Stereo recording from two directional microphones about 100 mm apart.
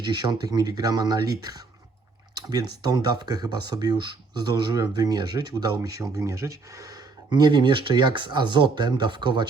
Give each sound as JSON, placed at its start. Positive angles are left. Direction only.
{"t": 0.0, "sound": "speech", "side_deg": -45}